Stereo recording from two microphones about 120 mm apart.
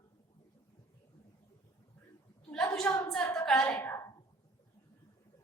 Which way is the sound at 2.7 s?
10° left (ahead or behind).